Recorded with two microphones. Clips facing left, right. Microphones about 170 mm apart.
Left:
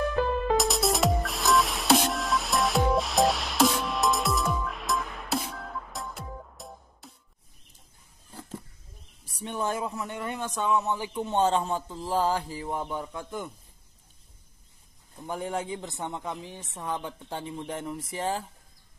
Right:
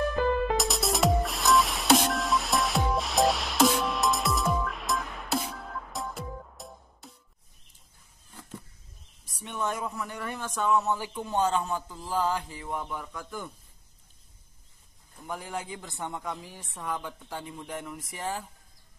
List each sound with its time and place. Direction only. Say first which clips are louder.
0.6 s music: left 2 dB; centre (ahead or behind)
9.2 s speech: left 2 dB; 30° left (ahead or behind)
15.2 s speech: left 4 dB; 30° left (ahead or behind)